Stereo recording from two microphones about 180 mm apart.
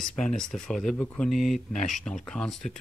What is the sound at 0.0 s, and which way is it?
Speech, 5° left (ahead or behind).